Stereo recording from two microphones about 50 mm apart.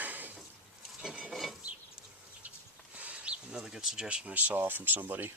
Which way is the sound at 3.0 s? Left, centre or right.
Right.